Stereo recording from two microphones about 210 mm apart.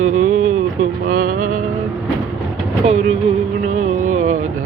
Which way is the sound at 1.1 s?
40° right (ahead or behind).